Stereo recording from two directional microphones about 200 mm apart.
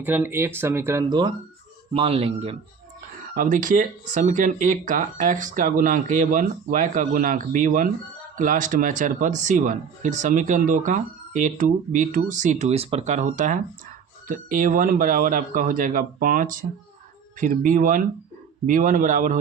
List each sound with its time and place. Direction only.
0.0 s speech: 10° right (ahead or behind)
1.9 s speech: 30° right (ahead or behind)
3.3 s speech: 40° right (ahead or behind)